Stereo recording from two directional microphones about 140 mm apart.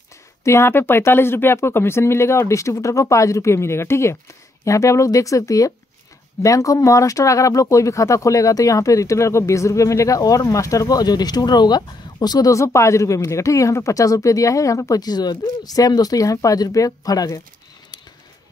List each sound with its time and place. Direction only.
0.4 s speech: 20° left (ahead or behind)